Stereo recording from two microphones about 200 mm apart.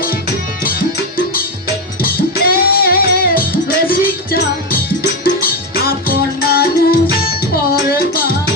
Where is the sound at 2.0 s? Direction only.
50° left (ahead or behind).